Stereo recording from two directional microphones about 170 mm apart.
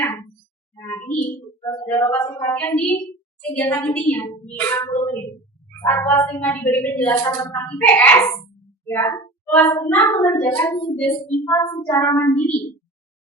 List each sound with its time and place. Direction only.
0.0 s a sound: 10° left (ahead or behind)
1.6 s speech: 15° left (ahead or behind)
10.6 s child singing: 20° left (ahead or behind)
10.9 s speech: 10° left (ahead or behind)